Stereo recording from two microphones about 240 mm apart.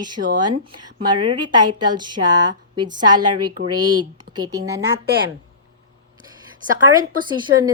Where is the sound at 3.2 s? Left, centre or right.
Right.